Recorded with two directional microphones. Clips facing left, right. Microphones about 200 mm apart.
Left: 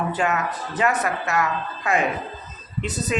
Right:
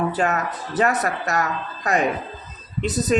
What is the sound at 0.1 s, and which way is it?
Speech, 40° right (ahead or behind).